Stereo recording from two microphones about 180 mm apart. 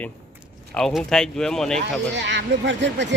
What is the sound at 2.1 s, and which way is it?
Speech, 80° right.